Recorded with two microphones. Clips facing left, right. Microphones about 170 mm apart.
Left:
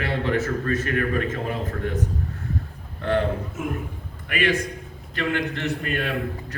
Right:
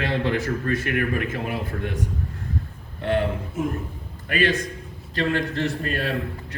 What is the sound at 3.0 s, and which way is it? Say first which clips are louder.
A man's voice: even; 25° right (ahead or behind).